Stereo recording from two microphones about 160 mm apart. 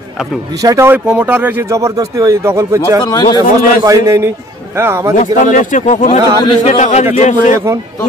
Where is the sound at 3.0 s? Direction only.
30° left (ahead or behind).